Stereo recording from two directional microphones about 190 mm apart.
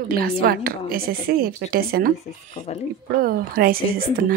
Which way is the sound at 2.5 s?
35° left (ahead or behind).